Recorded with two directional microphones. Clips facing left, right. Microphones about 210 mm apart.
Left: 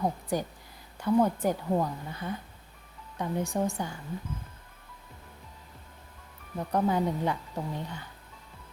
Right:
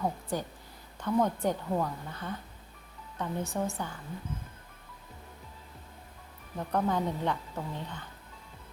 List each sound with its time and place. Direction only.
0.0 s speech: 15° left (ahead or behind)
6.6 s speech: 10° left (ahead or behind)